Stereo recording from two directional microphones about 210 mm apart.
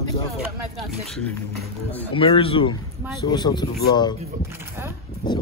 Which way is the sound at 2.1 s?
25° left (ahead or behind).